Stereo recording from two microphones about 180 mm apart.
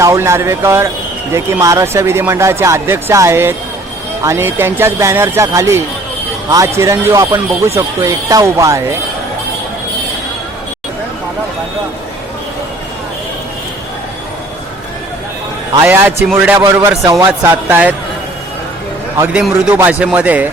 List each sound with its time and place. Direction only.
0.0 s speech: 15° right (ahead or behind)
15.8 s speech: 15° right (ahead or behind)
16.6 s a man's voice: 20° right (ahead or behind)
19.3 s speech: 10° right (ahead or behind)